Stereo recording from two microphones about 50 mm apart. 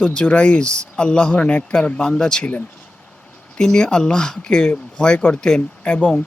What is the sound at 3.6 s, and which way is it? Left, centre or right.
A man's voice, centre.